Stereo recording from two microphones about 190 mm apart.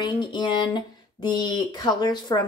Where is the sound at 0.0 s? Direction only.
25° left (ahead or behind).